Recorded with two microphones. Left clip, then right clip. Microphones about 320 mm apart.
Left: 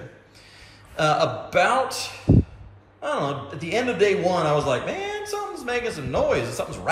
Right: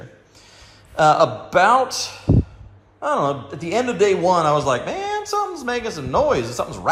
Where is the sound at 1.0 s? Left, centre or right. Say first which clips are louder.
Right 6 dB; centre.